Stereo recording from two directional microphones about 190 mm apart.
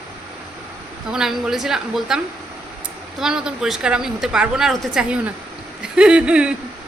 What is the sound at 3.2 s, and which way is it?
A woman's voice, 5° right (ahead or behind).